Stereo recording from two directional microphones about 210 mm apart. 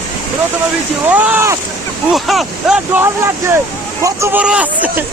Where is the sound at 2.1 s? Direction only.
Centre (ahead or behind).